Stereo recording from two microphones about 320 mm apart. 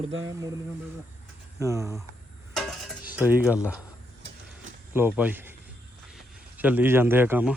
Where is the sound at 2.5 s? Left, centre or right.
Centre.